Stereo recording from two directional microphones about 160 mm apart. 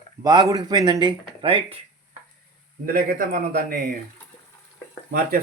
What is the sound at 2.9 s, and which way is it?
Speech, 60° right (ahead or behind).